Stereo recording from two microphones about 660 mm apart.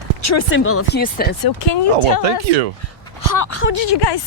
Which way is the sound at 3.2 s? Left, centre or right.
Left.